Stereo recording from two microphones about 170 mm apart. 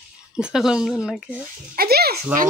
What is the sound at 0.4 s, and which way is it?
Speech, 5° right (ahead or behind).